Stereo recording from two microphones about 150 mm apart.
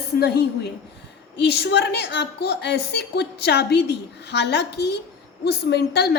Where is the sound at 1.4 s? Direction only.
90° left.